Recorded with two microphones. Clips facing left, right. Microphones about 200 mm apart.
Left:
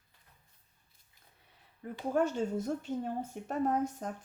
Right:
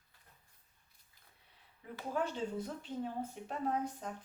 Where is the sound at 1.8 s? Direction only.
50° left (ahead or behind).